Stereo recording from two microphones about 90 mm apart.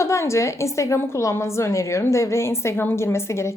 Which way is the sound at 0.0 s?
35° left (ahead or behind).